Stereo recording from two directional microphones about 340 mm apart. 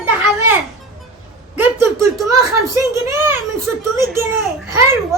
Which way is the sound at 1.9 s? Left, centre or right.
Centre.